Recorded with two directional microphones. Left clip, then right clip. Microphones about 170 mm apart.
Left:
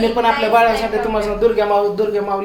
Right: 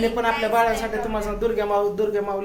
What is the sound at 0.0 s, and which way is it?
Speech, centre (ahead or behind).